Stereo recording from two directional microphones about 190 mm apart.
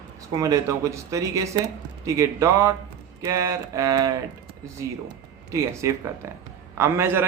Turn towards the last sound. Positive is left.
turn(degrees=-15)  # may be behind; listen again after turning